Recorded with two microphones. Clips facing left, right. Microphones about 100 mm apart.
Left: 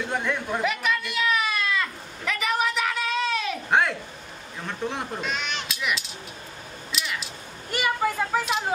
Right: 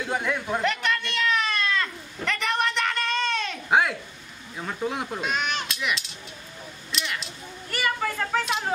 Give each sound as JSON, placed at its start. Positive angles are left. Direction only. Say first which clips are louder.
{"t": 0.1, "sound": "goat", "louder": "right 2 dB", "side_deg": -5}
{"t": 4.6, "sound": "speech", "louder": "right 1 dB", "side_deg": -5}
{"t": 5.2, "sound": "speech", "louder": "right 3 dB", "side_deg": -45}
{"t": 5.7, "sound": "children playing", "louder": "even", "side_deg": 0}
{"t": 6.9, "sound": "a sound", "louder": "even", "side_deg": 0}
{"t": 7.7, "sound": "a sound", "louder": "left 3 dB", "side_deg": 15}